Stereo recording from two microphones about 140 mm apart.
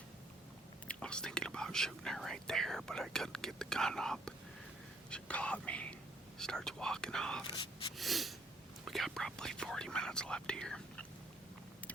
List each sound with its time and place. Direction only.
0.9 s speech: 5° left (ahead or behind)
7.5 s speech: 35° left (ahead or behind)
7.9 s speech: centre (ahead or behind)